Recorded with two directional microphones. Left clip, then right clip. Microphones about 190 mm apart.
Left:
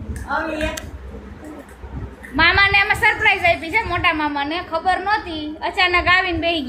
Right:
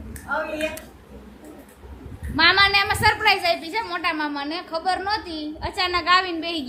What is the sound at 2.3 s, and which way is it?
A woman's voice, 15° right (ahead or behind).